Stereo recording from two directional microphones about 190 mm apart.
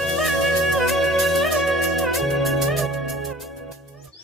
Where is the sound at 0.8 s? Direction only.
Centre (ahead or behind).